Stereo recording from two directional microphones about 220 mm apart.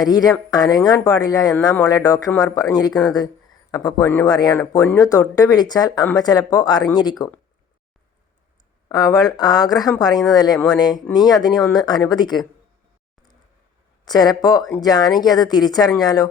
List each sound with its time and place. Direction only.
0.0 s speech: 15° left (ahead or behind)
3.7 s speech: 15° left (ahead or behind)
8.9 s speech: 15° left (ahead or behind)
14.0 s speech: 20° left (ahead or behind)